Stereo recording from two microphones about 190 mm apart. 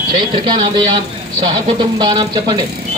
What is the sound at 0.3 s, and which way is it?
A man's voice, 25° right (ahead or behind).